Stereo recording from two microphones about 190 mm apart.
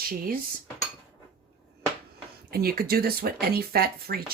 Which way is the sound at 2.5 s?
55° right (ahead or behind).